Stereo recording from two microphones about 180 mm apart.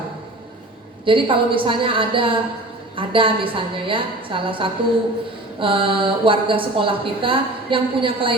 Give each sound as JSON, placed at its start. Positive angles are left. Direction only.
{"t": 1.0, "sound": "a woman's voice", "side_deg": -30}